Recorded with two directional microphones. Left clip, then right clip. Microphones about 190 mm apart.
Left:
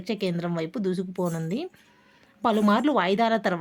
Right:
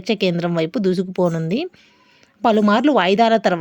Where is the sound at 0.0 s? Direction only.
35° right (ahead or behind).